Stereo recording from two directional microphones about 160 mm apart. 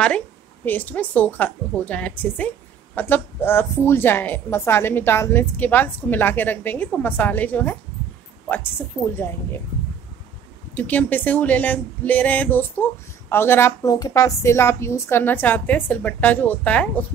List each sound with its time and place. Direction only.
0.7 s a woman's voice: 10° left (ahead or behind)
10.7 s a woman's voice: 10° left (ahead or behind)